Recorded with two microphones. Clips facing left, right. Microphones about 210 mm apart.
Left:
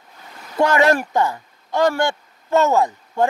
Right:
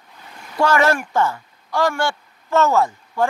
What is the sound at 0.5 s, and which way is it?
Speech, 20° left (ahead or behind).